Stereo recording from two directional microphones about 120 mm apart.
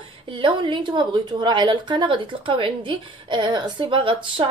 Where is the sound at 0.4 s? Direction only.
45° right (ahead or behind).